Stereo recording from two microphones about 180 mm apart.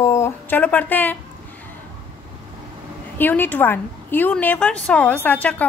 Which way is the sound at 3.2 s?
10° left (ahead or behind).